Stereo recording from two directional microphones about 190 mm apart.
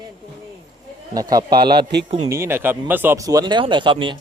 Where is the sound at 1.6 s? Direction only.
55° right (ahead or behind).